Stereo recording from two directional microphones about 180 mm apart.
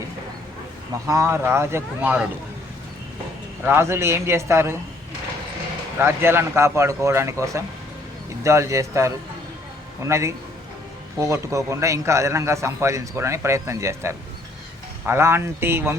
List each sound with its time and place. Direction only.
1.0 s a man's voice: 15° right (ahead or behind)
3.6 s a man's voice: 15° right (ahead or behind)
6.0 s a man's voice: 15° right (ahead or behind)